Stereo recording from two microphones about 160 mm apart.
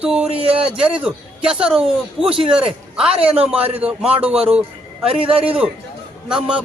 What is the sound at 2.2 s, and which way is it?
Speech, 35° right (ahead or behind).